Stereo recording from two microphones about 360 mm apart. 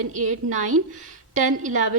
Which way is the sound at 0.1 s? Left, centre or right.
Centre.